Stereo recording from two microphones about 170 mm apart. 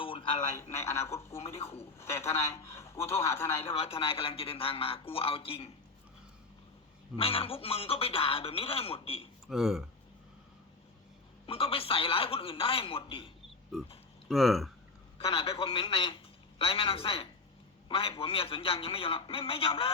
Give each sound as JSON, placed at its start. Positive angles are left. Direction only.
{"t": 0.0, "sound": "radio", "side_deg": 30}
{"t": 0.5, "sound": "a man's voice", "side_deg": 15}
{"t": 3.7, "sound": "speech", "side_deg": 35}
{"t": 7.2, "sound": "speech", "side_deg": 35}
{"t": 9.5, "sound": "speech", "side_deg": 0}
{"t": 11.4, "sound": "speech", "side_deg": 35}
{"t": 14.3, "sound": "speech", "side_deg": 0}
{"t": 15.2, "sound": "a man's voice", "side_deg": 35}